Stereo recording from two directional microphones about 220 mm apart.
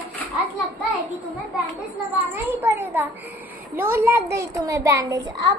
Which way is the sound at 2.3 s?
10° right (ahead or behind).